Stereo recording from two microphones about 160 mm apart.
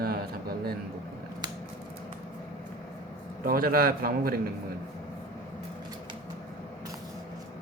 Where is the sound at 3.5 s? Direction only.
65° right (ahead or behind).